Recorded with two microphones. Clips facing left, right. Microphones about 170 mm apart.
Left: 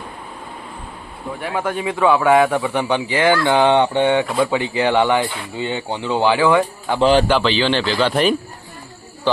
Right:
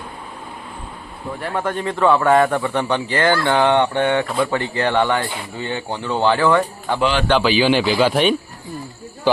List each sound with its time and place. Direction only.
1.4 s a man's voice: 5° left (ahead or behind)
7.0 s a man's voice: 35° left (ahead or behind)
7.4 s speech: 10° right (ahead or behind)